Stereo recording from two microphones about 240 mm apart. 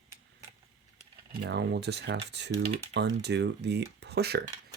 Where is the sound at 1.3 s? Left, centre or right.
Right.